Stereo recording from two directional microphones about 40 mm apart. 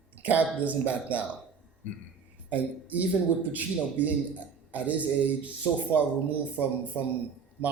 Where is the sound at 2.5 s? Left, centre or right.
Right.